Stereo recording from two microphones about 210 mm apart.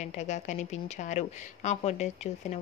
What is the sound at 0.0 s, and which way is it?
Speech, 35° left (ahead or behind).